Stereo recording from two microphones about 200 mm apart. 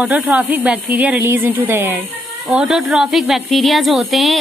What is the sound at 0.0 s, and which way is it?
Speech, 5° right (ahead or behind).